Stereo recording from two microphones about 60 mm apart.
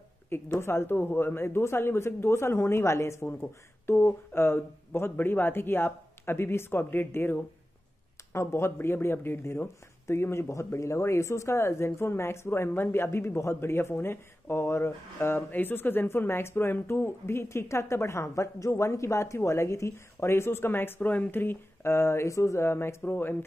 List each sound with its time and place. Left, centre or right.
0.3 s a woman's voice: left
3.3 s a woman's voice: left
10.5 s a woman's voice: left
23.0 s speech: left